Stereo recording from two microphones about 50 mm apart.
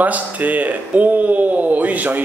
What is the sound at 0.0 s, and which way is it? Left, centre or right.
A man's voice, right.